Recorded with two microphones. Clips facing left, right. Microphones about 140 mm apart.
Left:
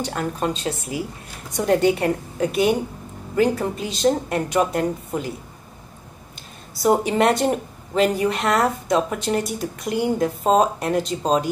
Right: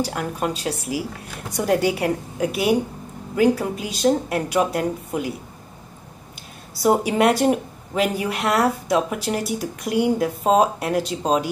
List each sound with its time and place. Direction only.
0.0 s a woman's voice: 5° right (ahead or behind)
6.7 s a woman's voice: centre (ahead or behind)